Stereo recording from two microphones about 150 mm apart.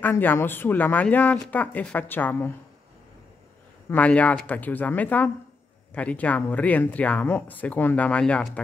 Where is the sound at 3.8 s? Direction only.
10° left (ahead or behind).